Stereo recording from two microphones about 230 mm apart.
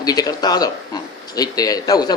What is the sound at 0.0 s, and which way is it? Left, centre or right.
A man's voice, centre.